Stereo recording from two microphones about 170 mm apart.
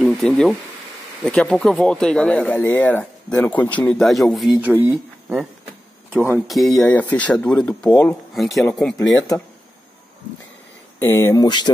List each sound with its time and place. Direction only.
0.0 s speech: centre (ahead or behind)
6.4 s speech: centre (ahead or behind)
8.4 s speech: centre (ahead or behind)
8.9 s speech: 20° left (ahead or behind)
11.0 s speech: 15° left (ahead or behind)